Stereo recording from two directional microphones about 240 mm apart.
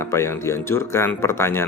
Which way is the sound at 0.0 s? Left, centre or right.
Centre.